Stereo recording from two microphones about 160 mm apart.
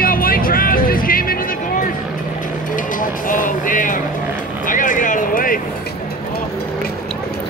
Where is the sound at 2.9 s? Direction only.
55° left (ahead or behind).